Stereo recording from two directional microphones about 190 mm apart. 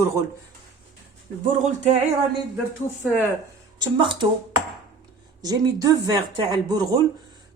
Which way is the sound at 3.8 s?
25° right (ahead or behind).